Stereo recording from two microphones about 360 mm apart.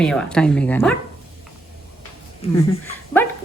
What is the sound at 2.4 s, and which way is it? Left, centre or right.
Speech, centre.